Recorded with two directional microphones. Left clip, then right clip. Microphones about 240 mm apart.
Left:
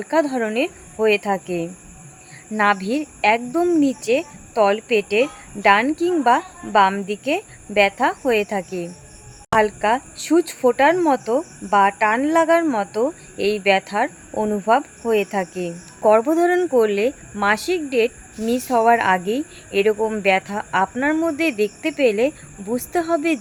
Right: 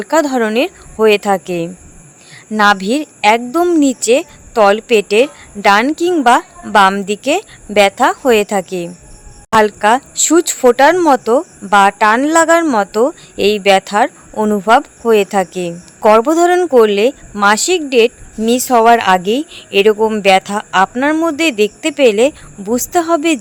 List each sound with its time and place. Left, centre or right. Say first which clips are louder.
0.0 s a woman's voice: right 7 dB; right